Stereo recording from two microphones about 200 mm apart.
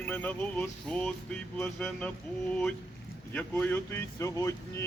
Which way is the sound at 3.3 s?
10° left (ahead or behind).